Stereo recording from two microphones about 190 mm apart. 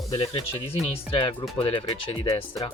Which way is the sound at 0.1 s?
30° left (ahead or behind).